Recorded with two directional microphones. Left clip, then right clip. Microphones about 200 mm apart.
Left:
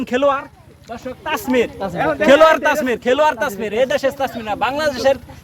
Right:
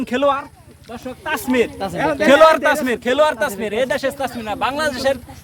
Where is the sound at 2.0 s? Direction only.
55° right (ahead or behind).